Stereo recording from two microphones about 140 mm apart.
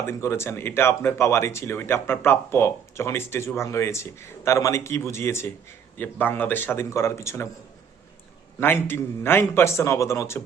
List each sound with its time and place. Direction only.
0.0 s speech: 20° left (ahead or behind)
8.6 s speech: 15° left (ahead or behind)